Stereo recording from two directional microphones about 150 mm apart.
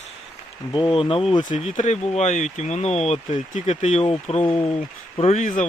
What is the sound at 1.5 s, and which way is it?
Speech, 50° left (ahead or behind).